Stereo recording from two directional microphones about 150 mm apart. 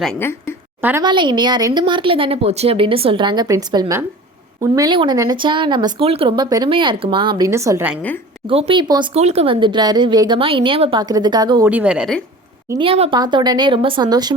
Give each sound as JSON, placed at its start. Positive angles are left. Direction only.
{"t": 0.2, "sound": "a woman's voice", "side_deg": 15}
{"t": 0.8, "sound": "a woman's voice", "side_deg": -15}
{"t": 1.0, "sound": "a woman's voice", "side_deg": -30}
{"t": 8.4, "sound": "a woman's voice", "side_deg": -40}
{"t": 9.1, "sound": "a woman's voice", "side_deg": -45}
{"t": 11.6, "sound": "speech", "side_deg": -10}
{"t": 12.8, "sound": "a woman's voice", "side_deg": -35}